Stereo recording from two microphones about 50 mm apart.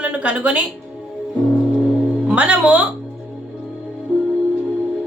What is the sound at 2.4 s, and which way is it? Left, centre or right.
Speech, right.